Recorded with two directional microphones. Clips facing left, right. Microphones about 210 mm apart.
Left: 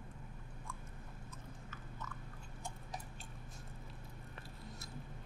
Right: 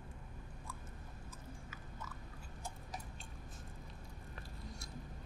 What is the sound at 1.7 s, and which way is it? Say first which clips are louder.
Chewing: left 1 dB; 10° right (ahead or behind).